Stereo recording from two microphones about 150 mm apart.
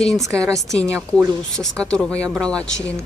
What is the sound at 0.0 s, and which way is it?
Speech, 5° left (ahead or behind).